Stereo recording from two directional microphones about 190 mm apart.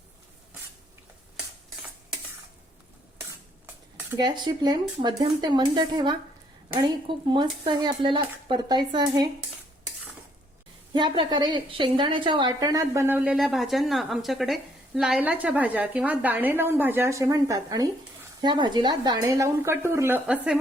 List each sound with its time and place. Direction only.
4.2 s speech: 20° right (ahead or behind)
10.9 s a woman's voice: 25° right (ahead or behind); by 20.6 s 5° right (ahead or behind)